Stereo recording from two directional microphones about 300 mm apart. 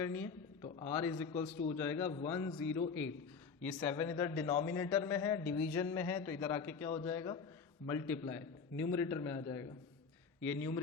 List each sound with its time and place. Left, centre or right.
0.0 s a man's voice: centre
2.9 s a man's voice: left
3.6 s a man's voice: centre